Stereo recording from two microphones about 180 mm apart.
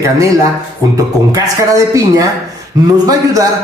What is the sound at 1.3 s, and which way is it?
A man's voice, 20° right (ahead or behind).